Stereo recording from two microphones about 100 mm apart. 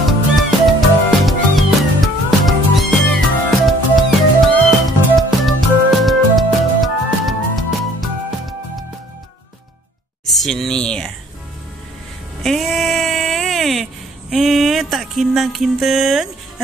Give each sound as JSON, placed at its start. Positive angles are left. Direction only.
{"t": 0.0, "sound": "cat", "side_deg": 0}
{"t": 5.4, "sound": "music", "side_deg": 0}
{"t": 10.2, "sound": "speech", "side_deg": 0}
{"t": 12.4, "sound": "a sound", "side_deg": 0}
{"t": 14.3, "sound": "music", "side_deg": -5}